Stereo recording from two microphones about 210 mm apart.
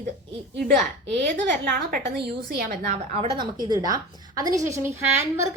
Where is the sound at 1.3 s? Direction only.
40° right (ahead or behind).